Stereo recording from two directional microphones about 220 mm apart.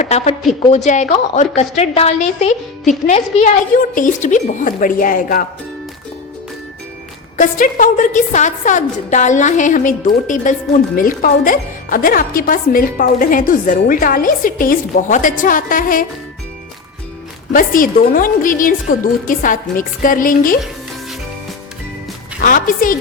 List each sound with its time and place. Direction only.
0.0 s a woman's voice: 30° left (ahead or behind)
7.3 s a woman's voice: 35° left (ahead or behind)
17.5 s a woman's voice: 40° left (ahead or behind)
22.4 s a woman's voice: 40° left (ahead or behind)